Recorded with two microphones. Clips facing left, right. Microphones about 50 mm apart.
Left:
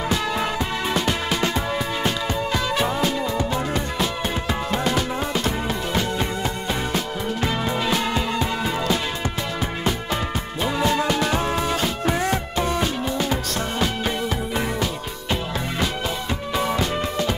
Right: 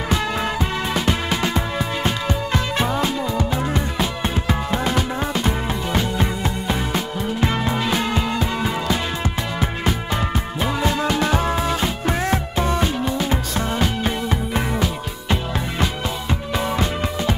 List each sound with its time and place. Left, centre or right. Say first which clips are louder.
0.3 s music: right 1 dB; centre
2.8 s music: right 1 dB; centre
10.6 s music: left 1 dB; centre
14.0 s music: right 2 dB; right
15.8 s music: even; centre